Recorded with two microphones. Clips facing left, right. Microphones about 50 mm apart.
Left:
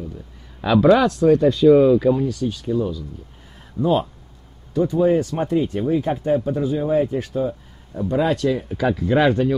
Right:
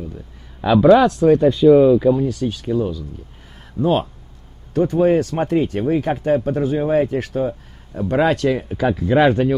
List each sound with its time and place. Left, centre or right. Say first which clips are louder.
0.6 s speech: right 3 dB; centre
1.0 s speech: right 2 dB; right
1.7 s speech: right 2 dB; centre
2.2 s speech: right 2 dB; right
8.6 s speech: right 2 dB; right